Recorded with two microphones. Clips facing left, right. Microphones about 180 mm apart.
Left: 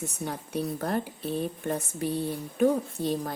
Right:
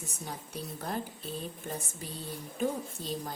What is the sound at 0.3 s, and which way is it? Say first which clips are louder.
A woman's voice: left 9 dB; 65° left (ahead or behind).